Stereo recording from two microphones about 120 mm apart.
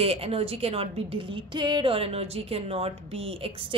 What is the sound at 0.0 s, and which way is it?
A woman's voice, 55° right (ahead or behind).